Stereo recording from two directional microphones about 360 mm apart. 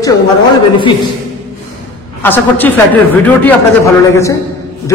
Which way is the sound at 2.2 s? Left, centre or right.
Centre.